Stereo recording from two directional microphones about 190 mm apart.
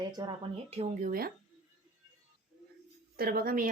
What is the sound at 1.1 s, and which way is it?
Speech, 50° right (ahead or behind).